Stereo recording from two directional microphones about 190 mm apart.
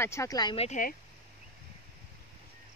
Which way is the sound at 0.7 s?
45° left (ahead or behind).